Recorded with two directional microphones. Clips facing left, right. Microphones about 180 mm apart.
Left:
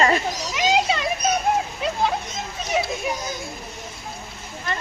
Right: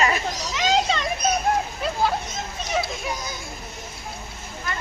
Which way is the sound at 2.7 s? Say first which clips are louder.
Left 2 dB; 10° left (ahead or behind).